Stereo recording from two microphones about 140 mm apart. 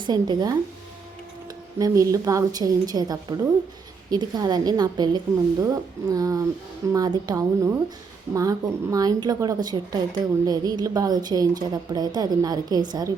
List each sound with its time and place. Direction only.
0.0 s a woman's voice: 30° right (ahead or behind)
1.8 s a woman's voice: 25° right (ahead or behind)